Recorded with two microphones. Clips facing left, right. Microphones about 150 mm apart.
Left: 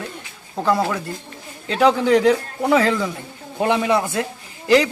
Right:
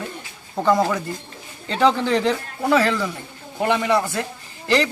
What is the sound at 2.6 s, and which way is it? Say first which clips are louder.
A man's voice: right 1 dB; 20° left (ahead or behind).